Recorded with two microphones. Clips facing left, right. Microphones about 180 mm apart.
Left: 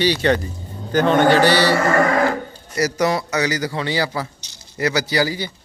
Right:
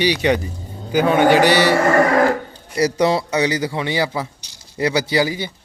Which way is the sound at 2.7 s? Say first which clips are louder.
Right 2 dB; 30° right (ahead or behind).